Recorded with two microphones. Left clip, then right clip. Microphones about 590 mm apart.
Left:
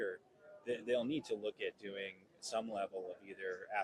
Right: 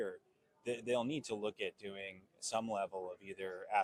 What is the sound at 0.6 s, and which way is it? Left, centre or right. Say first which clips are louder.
Speech: even; right.